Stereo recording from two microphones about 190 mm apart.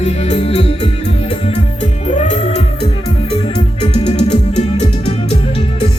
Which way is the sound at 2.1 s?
40° left (ahead or behind).